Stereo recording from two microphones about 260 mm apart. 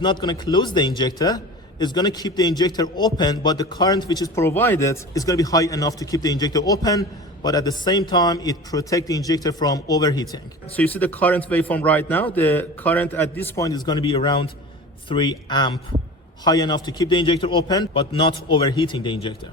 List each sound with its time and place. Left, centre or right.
0.0 s a man's voice: centre